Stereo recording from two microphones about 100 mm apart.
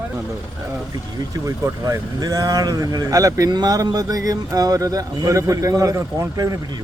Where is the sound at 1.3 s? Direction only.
35° right (ahead or behind).